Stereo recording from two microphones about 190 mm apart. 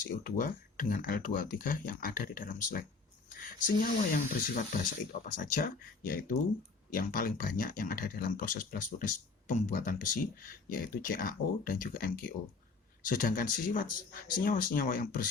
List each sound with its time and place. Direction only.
0.1 s speech: 50° left (ahead or behind)
4.1 s speech: 45° left (ahead or behind)